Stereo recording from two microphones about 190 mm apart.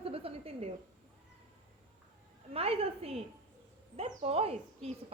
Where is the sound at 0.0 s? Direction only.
30° right (ahead or behind).